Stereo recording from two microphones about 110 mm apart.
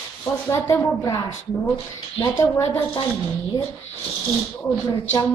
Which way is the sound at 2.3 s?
25° left (ahead or behind).